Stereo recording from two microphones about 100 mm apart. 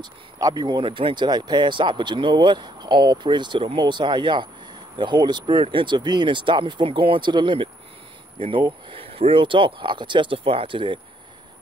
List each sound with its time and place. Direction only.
0.0 s speech: 40° right (ahead or behind); by 11.0 s 55° right (ahead or behind)